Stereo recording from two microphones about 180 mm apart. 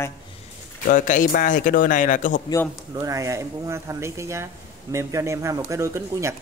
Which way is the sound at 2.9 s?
20° right (ahead or behind).